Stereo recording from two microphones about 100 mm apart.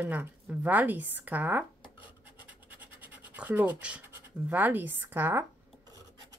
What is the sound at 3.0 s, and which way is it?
Scratch, 15° right (ahead or behind).